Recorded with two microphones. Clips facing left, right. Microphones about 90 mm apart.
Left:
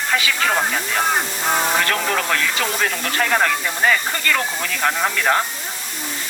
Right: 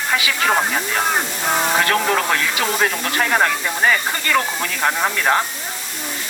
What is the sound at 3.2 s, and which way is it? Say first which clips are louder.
Speech: right 1 dB; 15° right (ahead or behind).